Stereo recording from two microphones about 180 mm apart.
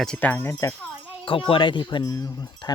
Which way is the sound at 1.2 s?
30° left (ahead or behind).